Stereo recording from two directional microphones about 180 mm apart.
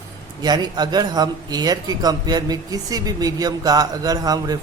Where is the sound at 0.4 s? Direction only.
25° right (ahead or behind).